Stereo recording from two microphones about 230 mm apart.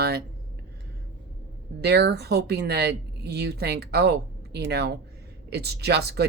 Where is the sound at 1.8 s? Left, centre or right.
Right.